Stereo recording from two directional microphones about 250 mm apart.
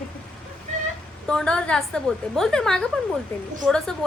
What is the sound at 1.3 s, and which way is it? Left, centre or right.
A woman's voice, centre.